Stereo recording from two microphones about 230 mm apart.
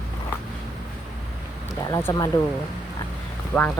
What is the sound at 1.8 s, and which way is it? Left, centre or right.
Speech, centre.